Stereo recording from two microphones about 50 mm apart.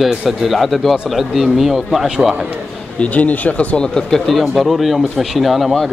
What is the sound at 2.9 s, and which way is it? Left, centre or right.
Speech, left.